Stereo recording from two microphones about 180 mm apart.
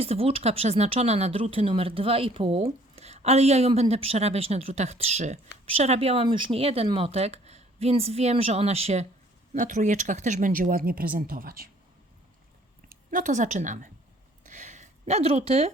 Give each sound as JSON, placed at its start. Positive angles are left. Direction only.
{"t": 0.0, "sound": "speech", "side_deg": -35}
{"t": 12.9, "sound": "a woman's voice", "side_deg": -45}
{"t": 14.4, "sound": "a sound", "side_deg": -40}